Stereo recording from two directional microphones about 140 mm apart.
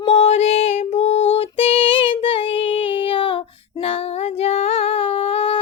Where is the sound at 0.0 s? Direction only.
50° left (ahead or behind).